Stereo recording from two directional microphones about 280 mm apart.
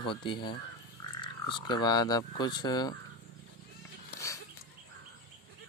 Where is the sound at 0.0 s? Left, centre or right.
Centre.